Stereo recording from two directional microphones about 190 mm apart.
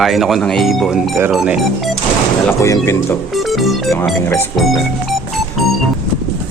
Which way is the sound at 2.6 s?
15° left (ahead or behind).